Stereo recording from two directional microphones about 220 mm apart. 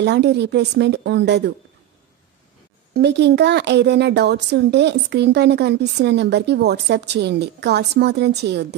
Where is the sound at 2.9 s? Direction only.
50° right (ahead or behind).